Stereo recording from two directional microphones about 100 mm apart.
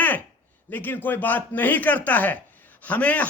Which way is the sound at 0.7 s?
20° left (ahead or behind).